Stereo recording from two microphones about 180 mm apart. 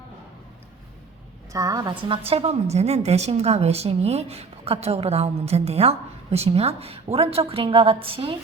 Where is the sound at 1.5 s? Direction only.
20° right (ahead or behind).